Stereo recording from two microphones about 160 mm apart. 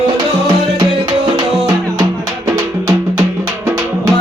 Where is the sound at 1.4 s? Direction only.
25° right (ahead or behind).